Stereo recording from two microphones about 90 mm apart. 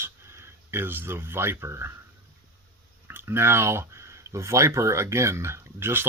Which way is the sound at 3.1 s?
25° right (ahead or behind).